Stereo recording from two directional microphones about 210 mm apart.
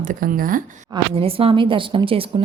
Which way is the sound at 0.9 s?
25° right (ahead or behind).